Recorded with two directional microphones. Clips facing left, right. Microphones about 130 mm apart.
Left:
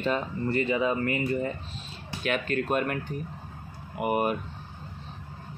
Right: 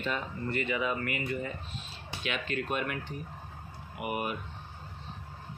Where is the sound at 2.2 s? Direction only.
45° left (ahead or behind).